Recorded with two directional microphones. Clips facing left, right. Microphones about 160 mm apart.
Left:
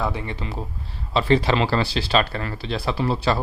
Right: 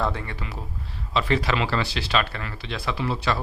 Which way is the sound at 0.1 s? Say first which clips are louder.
Left 3 dB; 20° left (ahead or behind).